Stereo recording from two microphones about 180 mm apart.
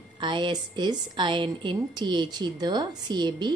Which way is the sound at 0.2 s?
25° right (ahead or behind).